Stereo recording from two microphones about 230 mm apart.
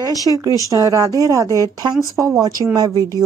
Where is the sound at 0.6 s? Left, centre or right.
Centre.